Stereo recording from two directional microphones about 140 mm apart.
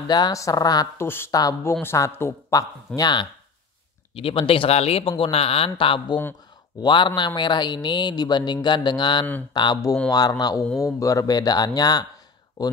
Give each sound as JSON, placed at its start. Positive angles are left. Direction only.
{"t": 0.1, "sound": "speech", "side_deg": 25}
{"t": 1.0, "sound": "speech", "side_deg": 15}
{"t": 3.0, "sound": "speech", "side_deg": 30}